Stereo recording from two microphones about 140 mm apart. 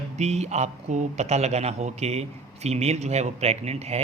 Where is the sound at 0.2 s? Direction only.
50° right (ahead or behind).